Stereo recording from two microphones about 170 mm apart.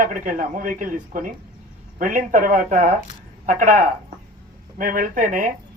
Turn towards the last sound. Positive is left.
turn(degrees=-50)  # may be behind; listen again after turning